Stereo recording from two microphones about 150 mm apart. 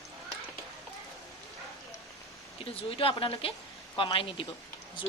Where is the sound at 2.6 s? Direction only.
40° left (ahead or behind).